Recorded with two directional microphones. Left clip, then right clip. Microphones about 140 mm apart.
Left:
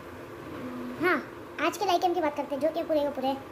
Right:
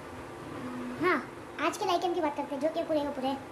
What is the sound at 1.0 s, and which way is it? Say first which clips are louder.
A child's voice: left 2 dB; 15° left (ahead or behind).